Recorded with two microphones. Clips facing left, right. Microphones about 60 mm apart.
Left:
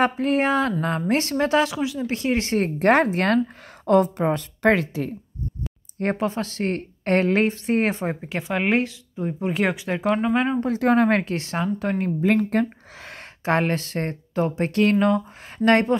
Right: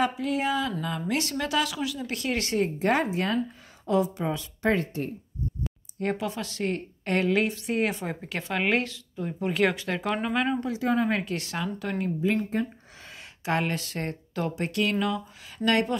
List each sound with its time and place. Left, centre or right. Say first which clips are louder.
0.0 s a woman's voice: left 6 dB; left
2.5 s speech: left 6 dB; left
3.8 s speech: left 7 dB; left
5.9 s a woman's voice: left 5 dB; left; by 10.0 s centre
10.0 s speech: left 8 dB; centre
10.3 s speech: left 5 dB; left
10.7 s speech: left 7 dB; left
11.3 s a woman's voice: left 6 dB; left
12.4 s a sound: left 6 dB; left
13.5 s a woman's voice: left 6 dB; left